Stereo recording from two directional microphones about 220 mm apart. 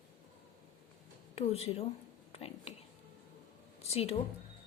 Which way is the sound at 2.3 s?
25° left (ahead or behind).